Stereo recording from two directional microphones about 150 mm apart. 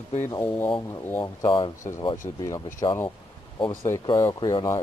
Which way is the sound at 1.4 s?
30° left (ahead or behind).